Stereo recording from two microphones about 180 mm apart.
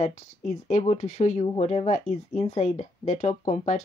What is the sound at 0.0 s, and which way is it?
Speech, 40° left (ahead or behind).